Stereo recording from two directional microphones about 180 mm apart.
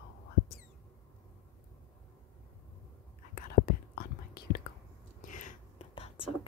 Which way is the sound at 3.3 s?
55° left (ahead or behind).